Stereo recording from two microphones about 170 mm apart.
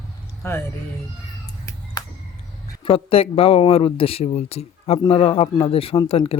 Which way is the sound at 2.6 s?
30° left (ahead or behind).